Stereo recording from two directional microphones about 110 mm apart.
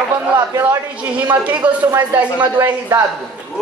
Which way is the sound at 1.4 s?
15° right (ahead or behind).